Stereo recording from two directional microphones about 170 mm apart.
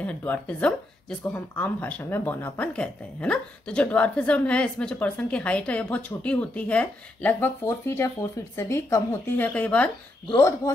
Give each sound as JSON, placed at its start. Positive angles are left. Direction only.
{"t": 0.0, "sound": "speech", "side_deg": 10}
{"t": 10.3, "sound": "speech", "side_deg": 20}